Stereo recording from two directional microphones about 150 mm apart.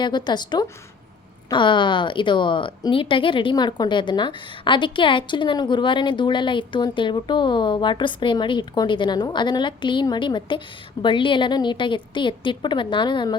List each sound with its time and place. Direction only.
0.0 s a woman's voice: 30° left (ahead or behind)